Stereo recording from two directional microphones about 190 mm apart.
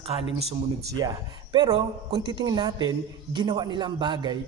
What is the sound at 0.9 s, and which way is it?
A man's voice, 20° right (ahead or behind).